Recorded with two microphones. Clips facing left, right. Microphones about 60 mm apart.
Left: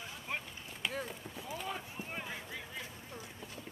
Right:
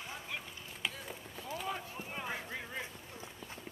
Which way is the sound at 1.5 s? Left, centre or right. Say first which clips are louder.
Right 2 dB; centre.